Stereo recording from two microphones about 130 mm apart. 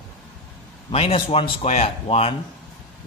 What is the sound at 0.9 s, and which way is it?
A man's voice, 45° left (ahead or behind).